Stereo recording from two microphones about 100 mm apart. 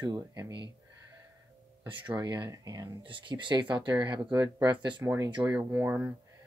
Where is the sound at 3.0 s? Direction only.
55° right (ahead or behind).